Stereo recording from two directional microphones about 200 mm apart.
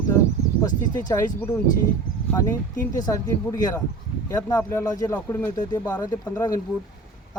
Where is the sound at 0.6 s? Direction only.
20° left (ahead or behind).